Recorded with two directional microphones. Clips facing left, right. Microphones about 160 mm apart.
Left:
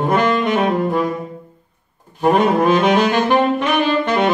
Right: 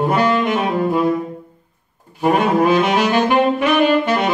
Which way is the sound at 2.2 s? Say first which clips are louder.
Left 1 dB; 10° right (ahead or behind).